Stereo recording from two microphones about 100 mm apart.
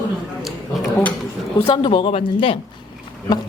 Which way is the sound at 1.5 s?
75° left (ahead or behind).